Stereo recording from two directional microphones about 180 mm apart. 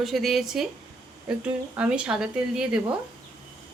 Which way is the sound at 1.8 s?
5° right (ahead or behind).